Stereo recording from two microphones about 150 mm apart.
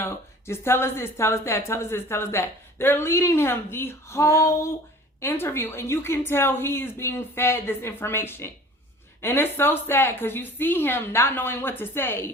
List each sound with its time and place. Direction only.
0.0 s a woman's voice: 15° left (ahead or behind)